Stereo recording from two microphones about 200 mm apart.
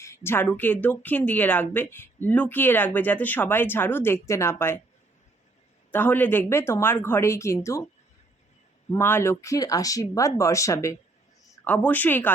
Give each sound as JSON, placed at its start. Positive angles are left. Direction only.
{"t": 0.0, "sound": "speech", "side_deg": 15}
{"t": 5.9, "sound": "speech", "side_deg": 10}
{"t": 8.9, "sound": "speech", "side_deg": 10}